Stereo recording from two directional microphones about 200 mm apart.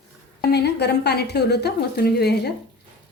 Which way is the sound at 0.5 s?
55° left (ahead or behind).